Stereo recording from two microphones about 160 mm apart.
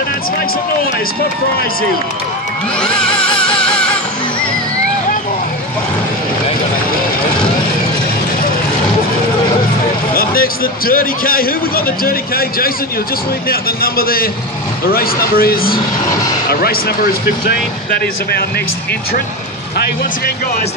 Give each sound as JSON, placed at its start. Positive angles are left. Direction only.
{"t": 3.7, "sound": "music", "side_deg": 5}
{"t": 10.1, "sound": "speech", "side_deg": 65}